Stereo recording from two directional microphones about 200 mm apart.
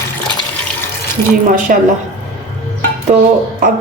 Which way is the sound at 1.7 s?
40° right (ahead or behind).